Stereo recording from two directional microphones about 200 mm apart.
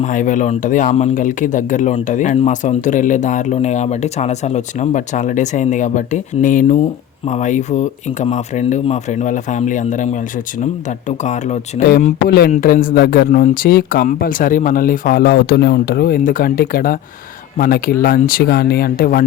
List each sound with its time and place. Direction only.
0.0 s speech: 40° left (ahead or behind)
11.8 s speech: 45° left (ahead or behind)